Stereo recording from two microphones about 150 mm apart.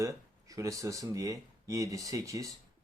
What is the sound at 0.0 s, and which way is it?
Speech, 20° right (ahead or behind).